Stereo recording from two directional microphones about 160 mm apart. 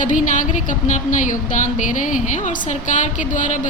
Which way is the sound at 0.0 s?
55° left (ahead or behind).